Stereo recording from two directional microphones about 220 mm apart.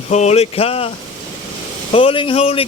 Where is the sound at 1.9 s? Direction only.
25° left (ahead or behind).